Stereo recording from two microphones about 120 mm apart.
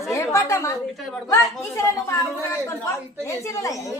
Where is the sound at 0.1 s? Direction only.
20° left (ahead or behind).